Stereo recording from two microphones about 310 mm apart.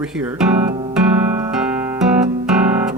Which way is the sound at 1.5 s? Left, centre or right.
Centre.